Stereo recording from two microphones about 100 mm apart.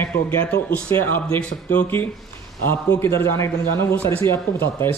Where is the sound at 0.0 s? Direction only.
20° left (ahead or behind).